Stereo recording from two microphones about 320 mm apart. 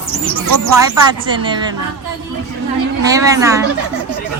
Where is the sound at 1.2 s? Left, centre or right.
Centre.